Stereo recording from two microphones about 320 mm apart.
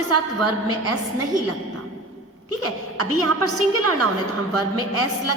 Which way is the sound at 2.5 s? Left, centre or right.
Right.